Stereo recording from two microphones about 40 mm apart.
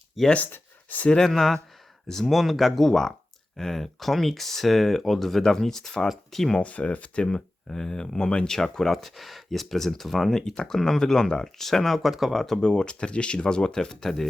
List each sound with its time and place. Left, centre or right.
0.2 s speech: centre
6.6 s speech: left
7.7 s speech: centre
8.5 s speech: centre
10.3 s speech: centre
12.5 s speech: left